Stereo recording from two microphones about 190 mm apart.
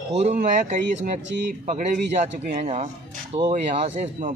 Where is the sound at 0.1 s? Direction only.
35° right (ahead or behind).